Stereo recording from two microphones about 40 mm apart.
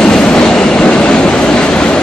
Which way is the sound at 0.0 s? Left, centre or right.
Left.